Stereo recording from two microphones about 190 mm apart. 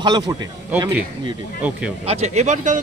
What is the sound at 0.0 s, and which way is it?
Speech, 20° right (ahead or behind).